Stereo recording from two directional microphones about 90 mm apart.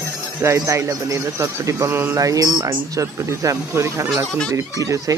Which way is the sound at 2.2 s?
40° right (ahead or behind).